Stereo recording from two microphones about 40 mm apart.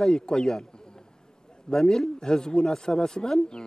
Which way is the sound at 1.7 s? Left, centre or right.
Centre.